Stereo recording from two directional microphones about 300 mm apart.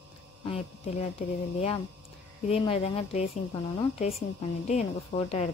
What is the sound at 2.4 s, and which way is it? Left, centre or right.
Speech, centre.